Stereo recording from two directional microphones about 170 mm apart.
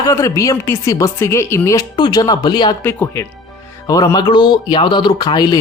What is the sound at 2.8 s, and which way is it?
Speech, 10° left (ahead or behind).